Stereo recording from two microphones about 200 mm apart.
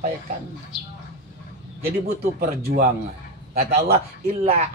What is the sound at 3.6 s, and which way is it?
Speech, 50° right (ahead or behind).